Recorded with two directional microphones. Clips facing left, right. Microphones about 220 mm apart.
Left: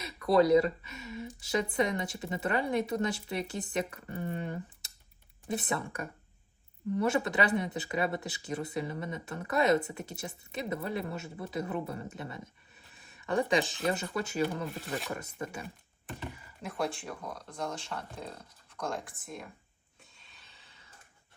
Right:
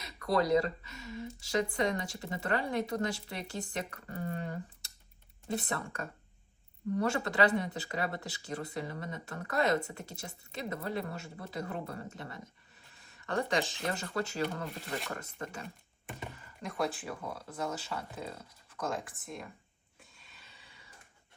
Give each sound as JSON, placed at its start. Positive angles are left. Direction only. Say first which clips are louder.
{"t": 0.3, "sound": "speech", "louder": "left 5 dB", "side_deg": 20}
{"t": 14.8, "sound": "speech", "louder": "left 2 dB", "side_deg": 0}
{"t": 15.1, "sound": "speech", "louder": "left 3 dB", "side_deg": 15}
{"t": 16.6, "sound": "speech", "louder": "even", "side_deg": 0}
{"t": 20.4, "sound": "a sound", "louder": "right 3 dB", "side_deg": -10}